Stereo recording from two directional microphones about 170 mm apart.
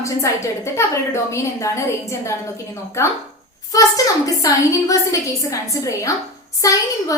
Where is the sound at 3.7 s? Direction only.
20° left (ahead or behind).